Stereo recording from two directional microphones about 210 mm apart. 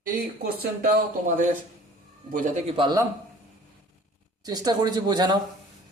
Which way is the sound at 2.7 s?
25° right (ahead or behind).